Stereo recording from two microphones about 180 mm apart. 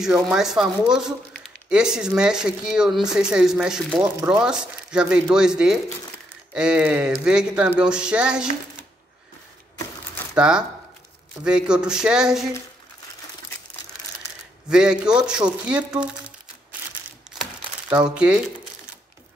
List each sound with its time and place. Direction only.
0.0 s speech: 5° right (ahead or behind)
10.3 s speech: 5° right (ahead or behind)
14.7 s speech: 5° right (ahead or behind)
17.4 s crumpling: 5° right (ahead or behind)
18.1 s speech: 5° right (ahead or behind)